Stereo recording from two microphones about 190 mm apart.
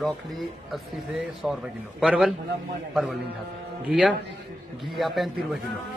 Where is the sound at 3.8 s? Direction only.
5° right (ahead or behind).